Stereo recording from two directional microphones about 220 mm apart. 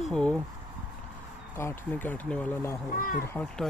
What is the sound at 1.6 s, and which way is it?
Speech, 10° left (ahead or behind).